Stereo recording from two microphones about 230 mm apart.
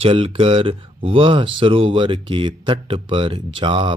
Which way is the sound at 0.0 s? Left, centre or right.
Right.